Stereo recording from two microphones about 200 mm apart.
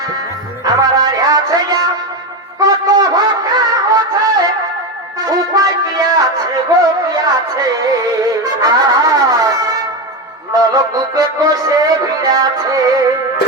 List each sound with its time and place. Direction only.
0.6 s music: 20° right (ahead or behind)